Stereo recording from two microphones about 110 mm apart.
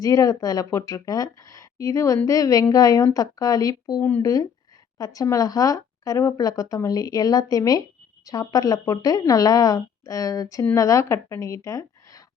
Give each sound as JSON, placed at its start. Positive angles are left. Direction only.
{"t": 0.0, "sound": "a woman's voice", "side_deg": 35}